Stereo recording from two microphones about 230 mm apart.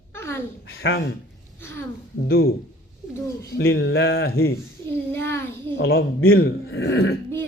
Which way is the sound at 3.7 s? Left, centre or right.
Left.